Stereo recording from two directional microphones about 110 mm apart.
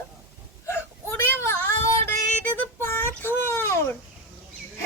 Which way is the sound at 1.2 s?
20° left (ahead or behind).